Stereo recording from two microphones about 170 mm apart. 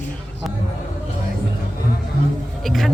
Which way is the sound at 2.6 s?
Centre (ahead or behind).